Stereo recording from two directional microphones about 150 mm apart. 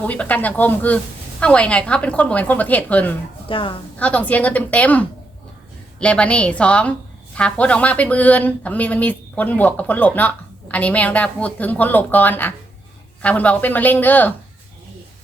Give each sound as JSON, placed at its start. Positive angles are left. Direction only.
{"t": 0.0, "sound": "speech", "side_deg": 10}
{"t": 3.5, "sound": "a woman's voice", "side_deg": 35}
{"t": 3.9, "sound": "speech", "side_deg": 10}